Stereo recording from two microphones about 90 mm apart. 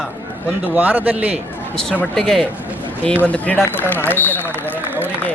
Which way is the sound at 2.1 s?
5° left (ahead or behind).